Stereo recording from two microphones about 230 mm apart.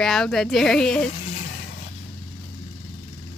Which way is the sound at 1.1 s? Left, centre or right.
Left.